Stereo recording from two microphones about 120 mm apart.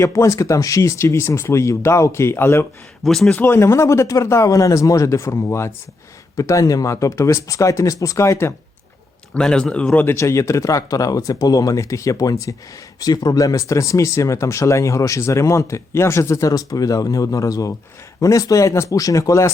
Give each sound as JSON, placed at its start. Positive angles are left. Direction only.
{"t": 0.0, "sound": "speech", "side_deg": 25}
{"t": 3.0, "sound": "speech", "side_deg": 5}
{"t": 9.3, "sound": "speech", "side_deg": 10}
{"t": 10.2, "sound": "speech", "side_deg": 25}